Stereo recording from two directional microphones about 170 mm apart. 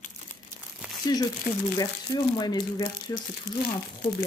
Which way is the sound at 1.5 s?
55° left (ahead or behind).